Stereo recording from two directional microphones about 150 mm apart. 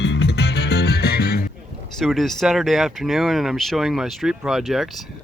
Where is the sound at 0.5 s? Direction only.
90° left.